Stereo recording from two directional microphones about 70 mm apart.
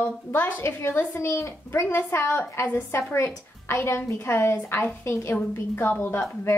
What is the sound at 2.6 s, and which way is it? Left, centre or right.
Speech, left.